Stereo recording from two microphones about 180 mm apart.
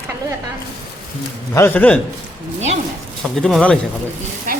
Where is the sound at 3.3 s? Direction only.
5° left (ahead or behind).